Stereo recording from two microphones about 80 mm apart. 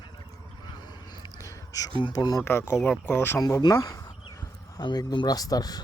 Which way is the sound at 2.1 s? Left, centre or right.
Left.